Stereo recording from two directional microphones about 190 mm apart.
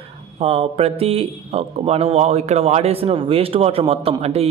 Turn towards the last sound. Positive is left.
turn(degrees=-30)  # may be behind; listen again after turning